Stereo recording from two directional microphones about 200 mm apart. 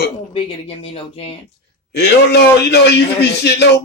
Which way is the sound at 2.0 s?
55° left (ahead or behind).